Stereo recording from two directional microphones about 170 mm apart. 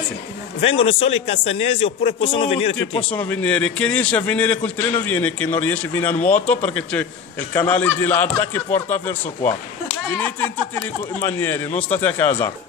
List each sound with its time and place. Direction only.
0.6 s a man's voice: 35° left (ahead or behind)
3.3 s a man's voice: 10° left (ahead or behind)